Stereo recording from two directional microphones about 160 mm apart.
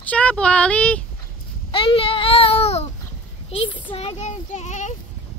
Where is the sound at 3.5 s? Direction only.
30° left (ahead or behind); by 4.9 s 50° left (ahead or behind).